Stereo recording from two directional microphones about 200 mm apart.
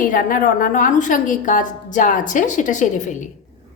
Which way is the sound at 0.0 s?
45° left (ahead or behind).